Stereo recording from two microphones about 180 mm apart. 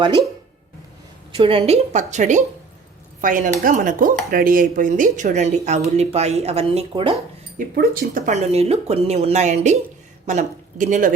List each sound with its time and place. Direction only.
1.3 s speech: 30° right (ahead or behind)
7.8 s speech: 50° right (ahead or behind)